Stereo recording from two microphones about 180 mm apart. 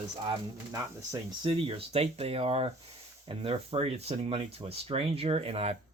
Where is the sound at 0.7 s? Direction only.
25° right (ahead or behind).